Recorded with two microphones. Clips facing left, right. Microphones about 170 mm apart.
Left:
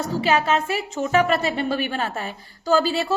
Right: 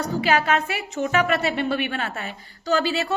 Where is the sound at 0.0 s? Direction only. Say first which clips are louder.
Left 1 dB; 25° left (ahead or behind).